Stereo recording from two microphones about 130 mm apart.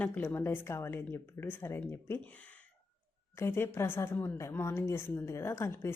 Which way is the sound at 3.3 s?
20° left (ahead or behind).